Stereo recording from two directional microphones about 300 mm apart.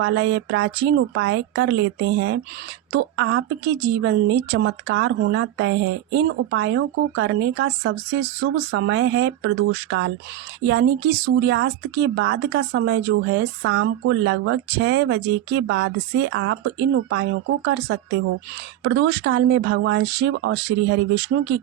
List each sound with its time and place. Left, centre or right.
0.0 s speech: right